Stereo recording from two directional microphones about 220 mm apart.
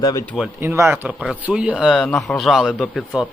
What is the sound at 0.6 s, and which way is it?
Speech, 10° right (ahead or behind).